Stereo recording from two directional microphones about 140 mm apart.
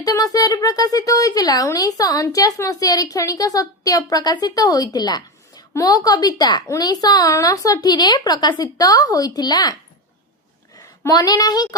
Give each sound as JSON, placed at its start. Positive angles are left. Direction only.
{"t": 0.0, "sound": "speech", "side_deg": 25}
{"t": 10.8, "sound": "a woman's voice", "side_deg": 25}